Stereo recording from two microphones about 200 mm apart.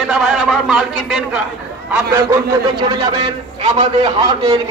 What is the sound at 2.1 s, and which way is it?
A man's voice, 20° right (ahead or behind).